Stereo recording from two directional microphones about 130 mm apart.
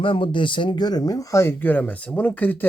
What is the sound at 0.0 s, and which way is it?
Speech, 40° left (ahead or behind).